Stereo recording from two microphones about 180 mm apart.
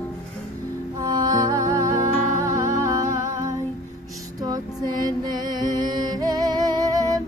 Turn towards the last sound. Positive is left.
turn(degrees=-20)  # may be behind; listen again after turning